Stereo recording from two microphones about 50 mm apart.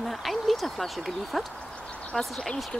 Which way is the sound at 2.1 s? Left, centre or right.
Centre.